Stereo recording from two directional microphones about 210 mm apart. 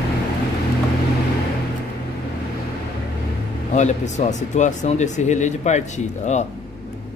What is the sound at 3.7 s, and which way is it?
Speech, 35° left (ahead or behind).